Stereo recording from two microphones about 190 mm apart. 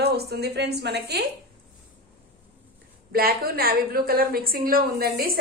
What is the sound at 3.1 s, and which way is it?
A woman's voice, 55° right (ahead or behind).